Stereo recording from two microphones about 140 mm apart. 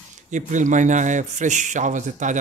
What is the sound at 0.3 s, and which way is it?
A man's voice, 60° right (ahead or behind).